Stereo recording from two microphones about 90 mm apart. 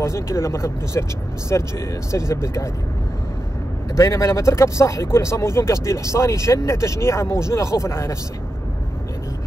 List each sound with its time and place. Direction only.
0.0 s speech: 30° left (ahead or behind)
3.9 s speech: 35° left (ahead or behind)